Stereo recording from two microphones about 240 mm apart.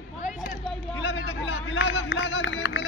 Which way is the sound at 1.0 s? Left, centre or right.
Left.